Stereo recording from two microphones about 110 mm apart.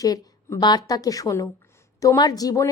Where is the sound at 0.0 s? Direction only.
35° left (ahead or behind).